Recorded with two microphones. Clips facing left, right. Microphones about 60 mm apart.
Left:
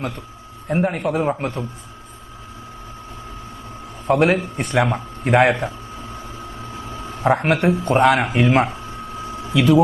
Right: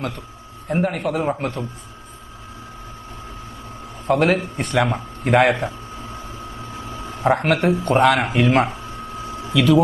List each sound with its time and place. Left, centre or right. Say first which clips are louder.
0.7 s speech: left 1 dB; centre
4.0 s speech: left 1 dB; centre
7.0 s a sound: even; centre
7.6 s speech: even; centre
8.9 s a sound: left 1 dB; left
9.6 s speech: left 1 dB; centre